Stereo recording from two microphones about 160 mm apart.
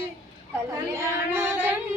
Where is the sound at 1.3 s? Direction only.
15° right (ahead or behind).